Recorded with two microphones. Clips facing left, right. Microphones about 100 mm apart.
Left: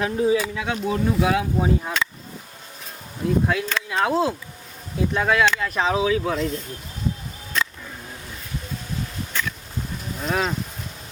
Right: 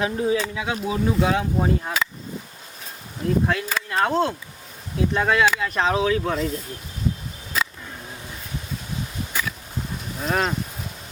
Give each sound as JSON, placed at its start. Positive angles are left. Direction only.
{"t": 0.0, "sound": "speech", "side_deg": 5}
{"t": 3.2, "sound": "speech", "side_deg": 0}
{"t": 7.5, "sound": "a sound", "side_deg": -5}
{"t": 10.2, "sound": "speech", "side_deg": 0}